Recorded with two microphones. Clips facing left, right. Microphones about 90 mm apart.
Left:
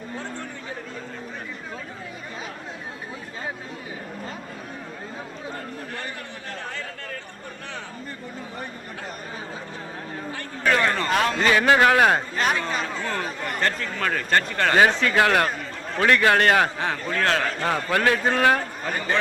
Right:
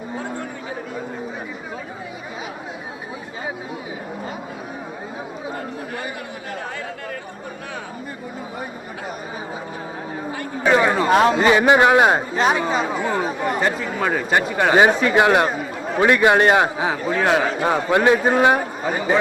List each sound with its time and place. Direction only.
0.2 s chatter: 10° right (ahead or behind)
10.3 s a man's voice: 10° right (ahead or behind)